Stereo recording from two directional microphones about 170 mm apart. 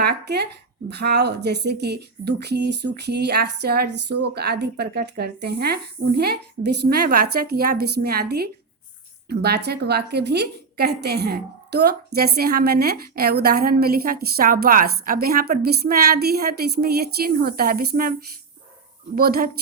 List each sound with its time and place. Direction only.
0.0 s a woman's voice: 75° right (ahead or behind); by 18.1 s 55° right (ahead or behind)
19.1 s a woman's voice: 60° right (ahead or behind)